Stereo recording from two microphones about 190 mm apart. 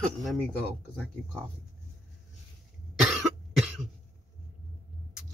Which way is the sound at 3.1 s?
Centre (ahead or behind).